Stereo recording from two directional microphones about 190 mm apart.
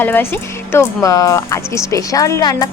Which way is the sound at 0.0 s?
10° left (ahead or behind).